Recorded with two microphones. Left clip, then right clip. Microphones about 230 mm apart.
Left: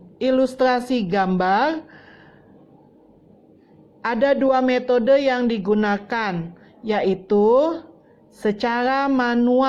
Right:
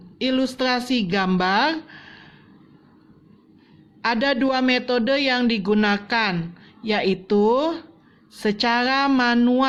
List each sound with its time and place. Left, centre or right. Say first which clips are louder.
0.2 s speech: left 5 dB; centre
4.0 s speech: left 3 dB; centre